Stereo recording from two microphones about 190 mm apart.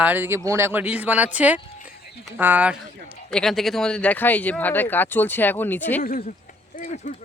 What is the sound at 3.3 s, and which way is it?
Speech, 5° left (ahead or behind).